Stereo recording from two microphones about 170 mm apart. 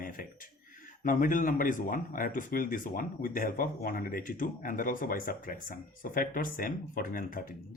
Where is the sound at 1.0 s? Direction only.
50° left (ahead or behind).